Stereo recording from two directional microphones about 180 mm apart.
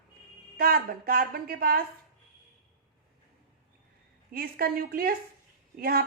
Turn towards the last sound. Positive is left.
turn(degrees=-55)  # may be behind; listen again after turning